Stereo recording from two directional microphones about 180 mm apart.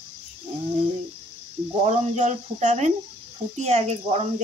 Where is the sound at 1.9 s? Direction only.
40° right (ahead or behind).